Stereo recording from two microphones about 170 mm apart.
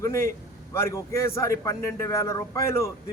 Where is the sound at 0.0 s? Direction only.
20° left (ahead or behind).